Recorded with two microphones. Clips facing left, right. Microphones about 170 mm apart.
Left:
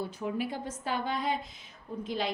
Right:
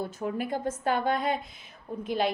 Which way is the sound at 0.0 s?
50° right (ahead or behind).